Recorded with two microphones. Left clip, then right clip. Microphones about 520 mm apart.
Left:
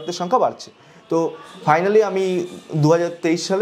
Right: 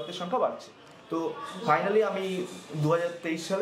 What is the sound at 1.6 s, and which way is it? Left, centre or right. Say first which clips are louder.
A man's voice: left 9 dB; left.